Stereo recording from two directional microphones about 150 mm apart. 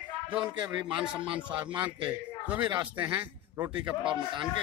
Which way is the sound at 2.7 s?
25° right (ahead or behind).